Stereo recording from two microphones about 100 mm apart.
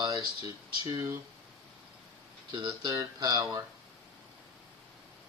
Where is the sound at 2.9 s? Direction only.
40° right (ahead or behind).